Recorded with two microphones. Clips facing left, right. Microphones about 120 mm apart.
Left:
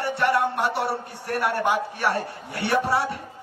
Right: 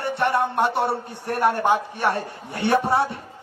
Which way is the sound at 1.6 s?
25° right (ahead or behind).